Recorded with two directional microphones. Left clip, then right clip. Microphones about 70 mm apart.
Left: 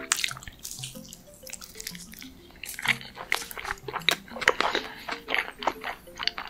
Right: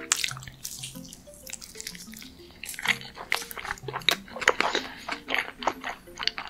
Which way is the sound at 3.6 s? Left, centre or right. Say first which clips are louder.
Even; centre.